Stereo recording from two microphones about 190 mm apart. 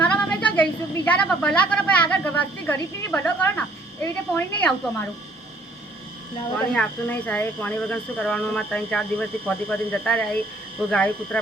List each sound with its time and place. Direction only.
0.0 s a sound: 5° left (ahead or behind)
4.0 s a woman's voice: 10° left (ahead or behind)
6.7 s a woman's voice: 5° left (ahead or behind)